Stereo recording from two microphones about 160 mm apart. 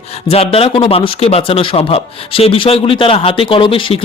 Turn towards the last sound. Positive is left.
turn(degrees=35)  # may be behind; listen again after turning